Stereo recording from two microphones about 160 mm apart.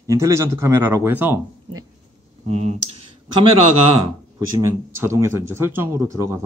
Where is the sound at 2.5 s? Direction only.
45° right (ahead or behind).